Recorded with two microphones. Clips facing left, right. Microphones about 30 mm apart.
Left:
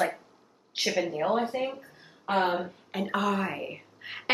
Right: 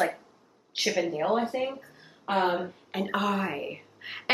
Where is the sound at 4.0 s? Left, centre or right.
Centre.